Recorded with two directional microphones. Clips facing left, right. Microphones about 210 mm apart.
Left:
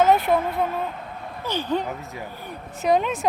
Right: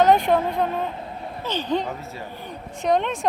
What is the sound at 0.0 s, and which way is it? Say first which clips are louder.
A woman's voice: right 1 dB; 5° left (ahead or behind).